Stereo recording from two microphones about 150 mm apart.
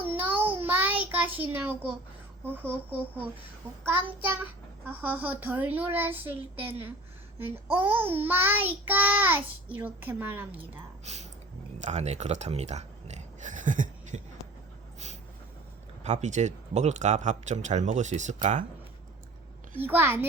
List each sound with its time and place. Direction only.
0.0 s child singing: 10° right (ahead or behind)
2.4 s a child's voice: 10° right (ahead or behind)
4.2 s a child's voice: 15° right (ahead or behind)
11.0 s speech: 45° right (ahead or behind)
11.8 s a sound: 50° right (ahead or behind)
16.0 s speech: 50° right (ahead or behind)
19.8 s a child's voice: 15° right (ahead or behind)